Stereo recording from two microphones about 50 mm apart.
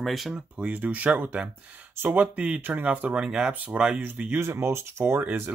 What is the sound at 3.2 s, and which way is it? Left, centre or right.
Speech, centre.